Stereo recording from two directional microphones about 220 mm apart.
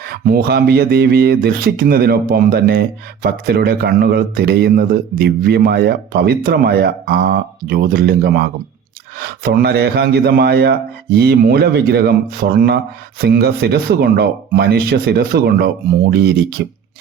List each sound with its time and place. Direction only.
0.0 s speech: 45° right (ahead or behind)